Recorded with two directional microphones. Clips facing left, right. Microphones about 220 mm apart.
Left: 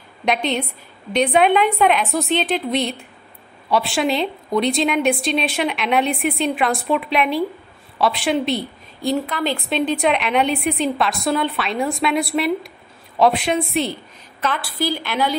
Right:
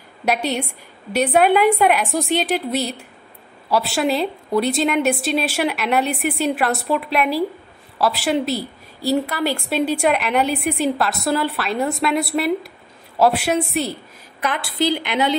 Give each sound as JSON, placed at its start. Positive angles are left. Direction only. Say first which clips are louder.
{"t": 0.2, "sound": "a woman's voice", "louder": "even", "side_deg": -5}
{"t": 14.4, "sound": "a woman's voice", "louder": "right 2 dB", "side_deg": -20}